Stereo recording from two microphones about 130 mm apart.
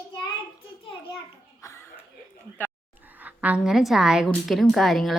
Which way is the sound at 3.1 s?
15° right (ahead or behind).